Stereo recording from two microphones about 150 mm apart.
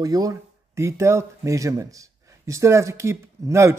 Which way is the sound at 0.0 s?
25° right (ahead or behind).